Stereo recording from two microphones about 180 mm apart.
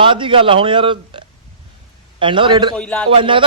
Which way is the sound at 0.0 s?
30° right (ahead or behind).